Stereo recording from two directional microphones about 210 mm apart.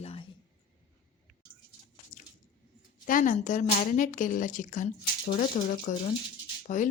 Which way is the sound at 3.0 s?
40° left (ahead or behind).